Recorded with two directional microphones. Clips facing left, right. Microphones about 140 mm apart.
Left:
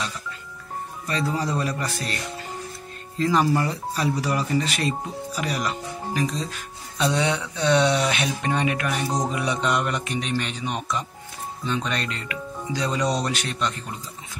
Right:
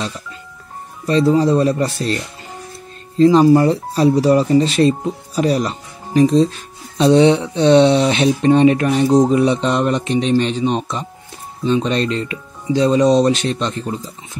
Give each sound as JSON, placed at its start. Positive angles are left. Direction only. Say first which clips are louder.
{"t": 1.0, "sound": "speech", "louder": "right 13 dB", "side_deg": -25}
{"t": 3.2, "sound": "speech", "louder": "right 11 dB", "side_deg": -25}